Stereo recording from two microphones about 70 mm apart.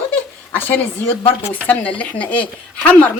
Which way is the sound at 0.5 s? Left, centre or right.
Left.